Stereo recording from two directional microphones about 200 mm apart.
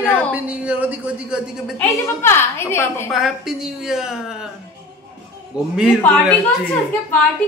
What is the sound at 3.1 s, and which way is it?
A woman's voice, centre (ahead or behind).